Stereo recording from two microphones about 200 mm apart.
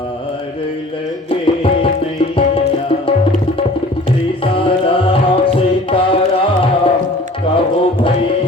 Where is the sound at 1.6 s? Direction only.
25° left (ahead or behind).